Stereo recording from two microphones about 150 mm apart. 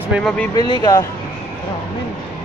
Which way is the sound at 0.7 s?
25° left (ahead or behind).